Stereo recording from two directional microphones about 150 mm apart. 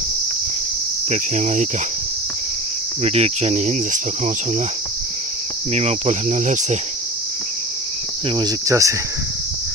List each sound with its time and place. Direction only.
1.1 s cricket: 50° right (ahead or behind)
3.0 s cricket: 45° right (ahead or behind)
5.7 s cricket: 50° right (ahead or behind)
8.4 s cricket: 25° right (ahead or behind)